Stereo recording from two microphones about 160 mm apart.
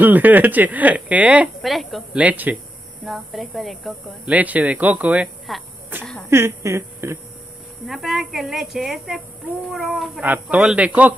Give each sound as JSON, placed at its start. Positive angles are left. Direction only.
{"t": 0.0, "sound": "speech", "side_deg": -10}
{"t": 7.8, "sound": "speech", "side_deg": 0}